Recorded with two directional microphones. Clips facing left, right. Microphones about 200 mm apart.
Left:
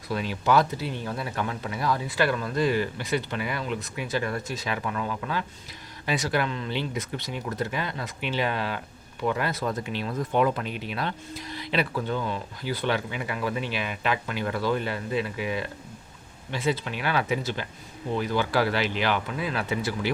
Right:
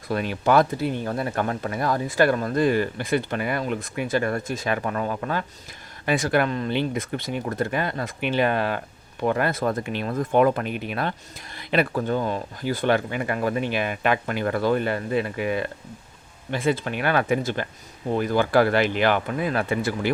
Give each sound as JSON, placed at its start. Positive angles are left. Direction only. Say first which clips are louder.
{"t": 0.1, "sound": "speech", "louder": "right 3 dB", "side_deg": -55}